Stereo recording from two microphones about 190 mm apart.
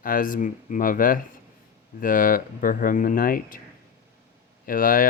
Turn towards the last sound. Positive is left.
turn(degrees=45)  # may be behind; listen again after turning